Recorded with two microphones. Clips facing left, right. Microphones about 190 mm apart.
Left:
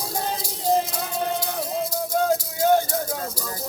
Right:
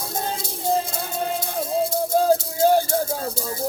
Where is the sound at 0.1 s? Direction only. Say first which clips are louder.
Right 1 dB; 25° right (ahead or behind).